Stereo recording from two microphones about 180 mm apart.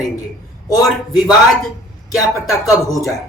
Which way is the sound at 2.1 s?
20° left (ahead or behind).